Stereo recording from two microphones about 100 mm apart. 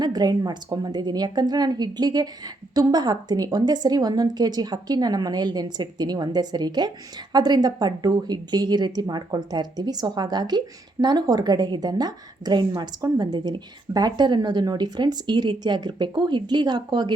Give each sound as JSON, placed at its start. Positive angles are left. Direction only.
{"t": 0.0, "sound": "a woman's voice", "side_deg": -40}